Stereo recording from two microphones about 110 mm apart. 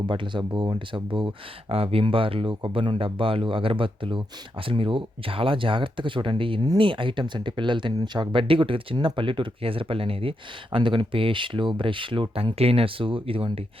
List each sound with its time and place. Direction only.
0.1 s speech: 50° right (ahead or behind)
1.7 s speech: 60° right (ahead or behind)